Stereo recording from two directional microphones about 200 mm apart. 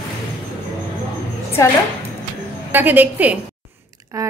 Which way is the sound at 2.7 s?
10° right (ahead or behind).